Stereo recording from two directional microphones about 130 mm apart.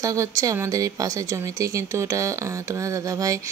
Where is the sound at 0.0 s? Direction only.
25° right (ahead or behind).